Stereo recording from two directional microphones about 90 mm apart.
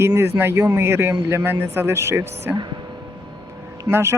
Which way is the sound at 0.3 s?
25° right (ahead or behind).